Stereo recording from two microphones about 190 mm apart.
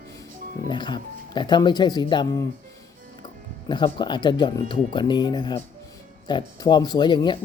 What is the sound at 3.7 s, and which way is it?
Speech, 25° left (ahead or behind).